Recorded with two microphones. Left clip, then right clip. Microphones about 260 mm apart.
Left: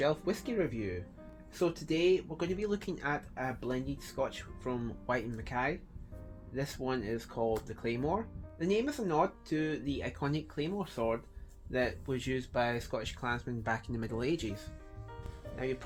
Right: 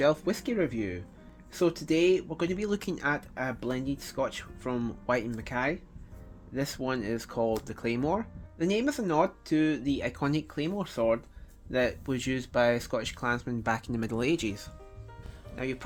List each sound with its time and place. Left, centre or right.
0.0 s speech: right